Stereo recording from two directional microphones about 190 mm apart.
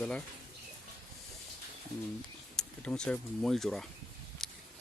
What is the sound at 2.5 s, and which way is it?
Speech, 5° left (ahead or behind).